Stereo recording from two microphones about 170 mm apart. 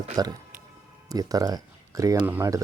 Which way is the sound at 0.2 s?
20° right (ahead or behind).